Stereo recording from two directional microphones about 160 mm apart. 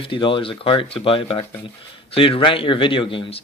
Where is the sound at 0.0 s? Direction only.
35° left (ahead or behind).